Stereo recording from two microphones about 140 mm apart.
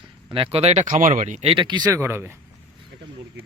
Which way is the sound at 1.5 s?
35° right (ahead or behind).